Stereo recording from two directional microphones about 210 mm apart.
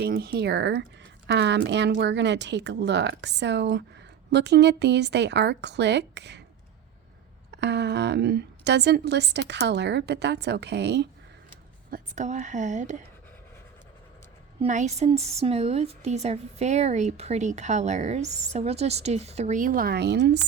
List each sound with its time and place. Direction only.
0.0 s a woman's voice: 45° right (ahead or behind)
7.5 s a woman's voice: 55° right (ahead or behind)
11.9 s a woman's voice: 40° right (ahead or behind)
14.6 s a woman's voice: 35° right (ahead or behind); by 20.4 s 55° right (ahead or behind)